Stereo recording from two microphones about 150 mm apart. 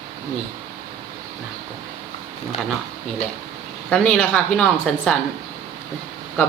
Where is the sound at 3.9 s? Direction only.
10° left (ahead or behind).